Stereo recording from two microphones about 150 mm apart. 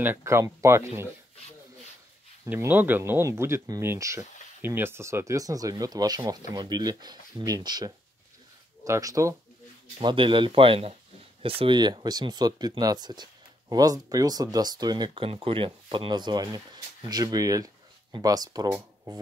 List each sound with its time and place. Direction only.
0.0 s speech: 15° right (ahead or behind)
2.4 s speech: 15° right (ahead or behind)
9.9 s speech: 35° right (ahead or behind)